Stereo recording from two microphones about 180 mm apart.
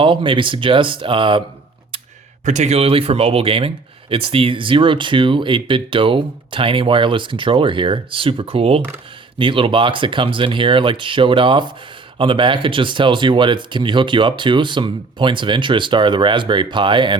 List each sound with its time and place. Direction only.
0.0 s speech: 30° right (ahead or behind)
2.4 s speech: 40° right (ahead or behind)